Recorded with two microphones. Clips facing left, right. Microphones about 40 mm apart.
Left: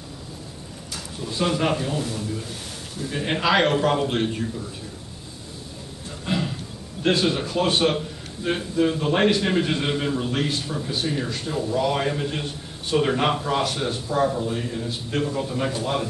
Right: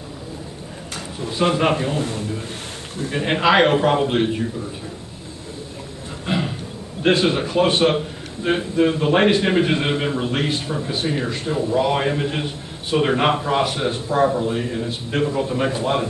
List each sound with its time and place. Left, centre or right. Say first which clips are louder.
1.2 s a man's voice: right 4 dB; right
6.2 s a sound: right 3 dB; centre
7.0 s a man's voice: right 4 dB; right